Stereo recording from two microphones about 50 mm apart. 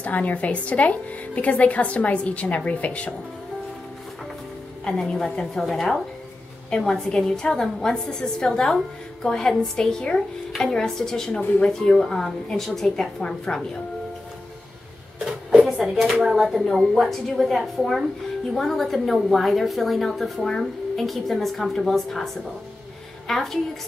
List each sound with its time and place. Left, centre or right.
0.0 s a woman's voice: left
4.8 s a woman's voice: centre
15.8 s a woman's voice: centre